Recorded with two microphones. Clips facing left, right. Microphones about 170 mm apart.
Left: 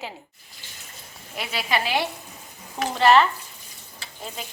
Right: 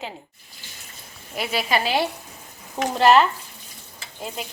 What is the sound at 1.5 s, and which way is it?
Speech, 40° right (ahead or behind).